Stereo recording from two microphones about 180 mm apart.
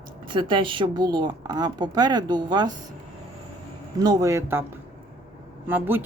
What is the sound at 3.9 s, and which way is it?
Speech, 20° right (ahead or behind).